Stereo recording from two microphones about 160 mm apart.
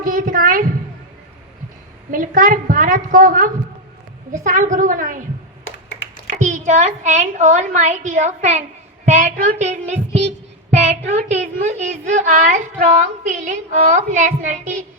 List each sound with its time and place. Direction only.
0.0 s a sound: 60° right (ahead or behind)
2.0 s a woman's voice: 60° right (ahead or behind)
6.4 s child singing: 50° right (ahead or behind)